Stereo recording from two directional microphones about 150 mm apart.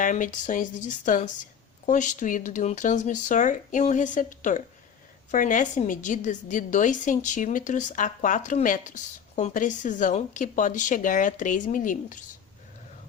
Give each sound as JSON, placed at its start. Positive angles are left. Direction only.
{"t": 0.0, "sound": "a woman's voice", "side_deg": 60}